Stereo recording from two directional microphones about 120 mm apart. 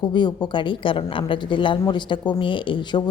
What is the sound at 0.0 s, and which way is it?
A woman's voice, 40° left (ahead or behind).